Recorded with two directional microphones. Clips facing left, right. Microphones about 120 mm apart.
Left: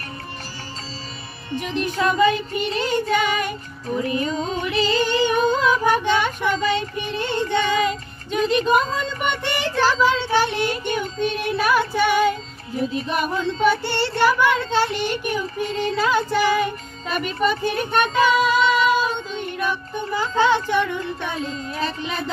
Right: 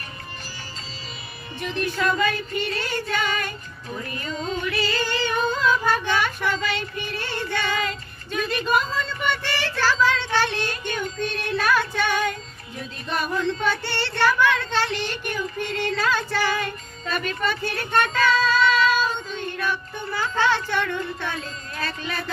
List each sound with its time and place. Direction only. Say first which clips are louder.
1.5 s music: left 3 dB; 15° left (ahead or behind)
2.0 s child singing: left 6 dB; 20° left (ahead or behind)
4.6 s female singing: left 7 dB; 20° left (ahead or behind)
12.9 s music: left 5 dB; 15° left (ahead or behind)
13.8 s speech: left 3 dB; 15° left (ahead or behind)